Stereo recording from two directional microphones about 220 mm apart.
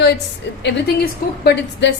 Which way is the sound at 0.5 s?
55° left (ahead or behind).